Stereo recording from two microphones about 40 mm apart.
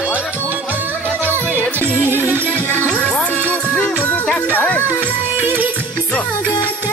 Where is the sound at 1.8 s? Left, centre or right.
Left.